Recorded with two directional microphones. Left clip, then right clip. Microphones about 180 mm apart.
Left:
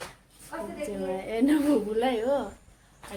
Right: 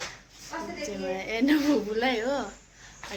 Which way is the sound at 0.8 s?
20° left (ahead or behind).